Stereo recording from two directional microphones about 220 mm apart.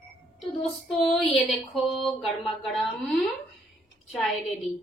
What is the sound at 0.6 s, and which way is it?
A woman's voice, centre (ahead or behind).